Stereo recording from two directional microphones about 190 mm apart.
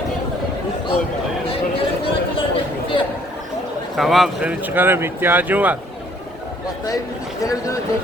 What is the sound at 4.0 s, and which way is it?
Speech, centre (ahead or behind).